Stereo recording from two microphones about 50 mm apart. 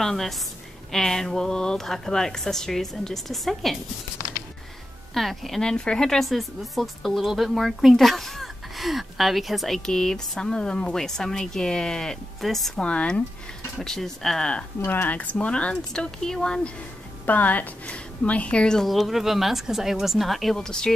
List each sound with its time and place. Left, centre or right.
0.0 s a woman's voice: centre
5.1 s speech: centre
5.6 s speech: centre
6.1 s speech: centre
9.8 s speech: centre
12.7 s a woman's voice: left
13.7 s speech: centre
14.9 s speech: left
15.3 s speech: left
17.3 s a woman's voice: left
18.9 s speech: centre
20.5 s speech: centre